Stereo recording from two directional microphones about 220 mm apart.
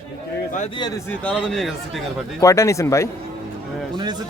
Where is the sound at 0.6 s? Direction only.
20° left (ahead or behind).